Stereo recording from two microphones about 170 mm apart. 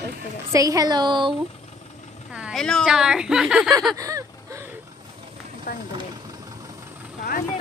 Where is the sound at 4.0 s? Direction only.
20° right (ahead or behind).